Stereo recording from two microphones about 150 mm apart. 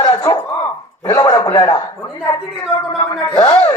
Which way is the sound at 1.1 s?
25° left (ahead or behind).